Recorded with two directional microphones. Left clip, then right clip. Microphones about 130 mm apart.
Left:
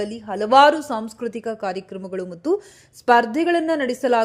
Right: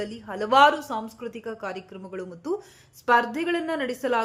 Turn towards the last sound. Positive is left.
turn(degrees=40)  # may be behind; listen again after turning